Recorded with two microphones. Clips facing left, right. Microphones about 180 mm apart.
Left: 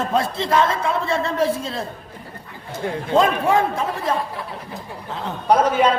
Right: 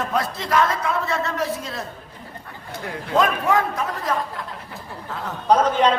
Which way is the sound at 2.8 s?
30° left (ahead or behind).